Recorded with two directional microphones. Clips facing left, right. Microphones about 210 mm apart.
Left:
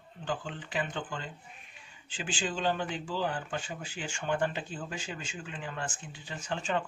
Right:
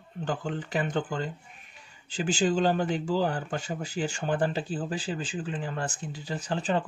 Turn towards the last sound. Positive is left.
turn(degrees=-35)  # may be behind; listen again after turning